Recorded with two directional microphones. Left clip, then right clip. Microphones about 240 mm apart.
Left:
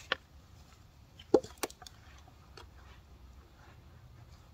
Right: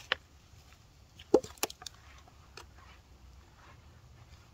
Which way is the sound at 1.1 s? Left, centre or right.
Right.